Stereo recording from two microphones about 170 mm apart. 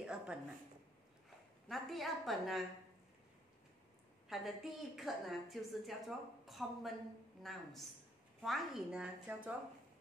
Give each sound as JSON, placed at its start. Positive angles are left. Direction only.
{"t": 0.0, "sound": "a sound", "side_deg": -5}
{"t": 1.7, "sound": "a woman's voice", "side_deg": 0}
{"t": 4.3, "sound": "a woman's voice", "side_deg": 0}